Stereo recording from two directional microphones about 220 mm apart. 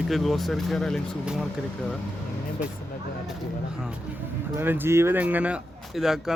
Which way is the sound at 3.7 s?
5° right (ahead or behind).